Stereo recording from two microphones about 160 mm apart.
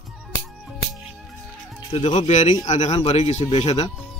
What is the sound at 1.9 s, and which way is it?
Speech, 35° left (ahead or behind).